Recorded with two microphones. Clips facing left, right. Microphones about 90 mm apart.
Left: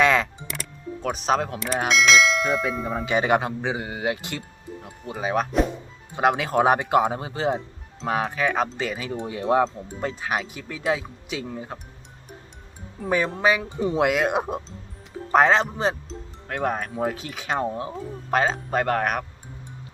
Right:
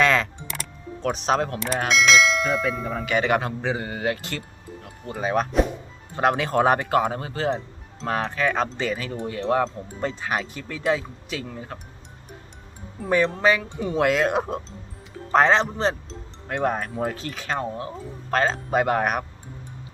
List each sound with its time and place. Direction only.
0.0 s music: 15° left (ahead or behind)
1.0 s church bell: centre (ahead or behind)
3.0 s speech: 20° left (ahead or behind)
5.1 s church bell: 5° left (ahead or behind)
6.1 s speech: 5° left (ahead or behind)
9.6 s speech: 5° left (ahead or behind)
13.0 s speech: 5° left (ahead or behind)
15.3 s church bell: 5° left (ahead or behind)
16.5 s speech: centre (ahead or behind)
17.7 s speech: 25° left (ahead or behind)
18.3 s speech: 5° left (ahead or behind)
18.7 s speech: 10° right (ahead or behind)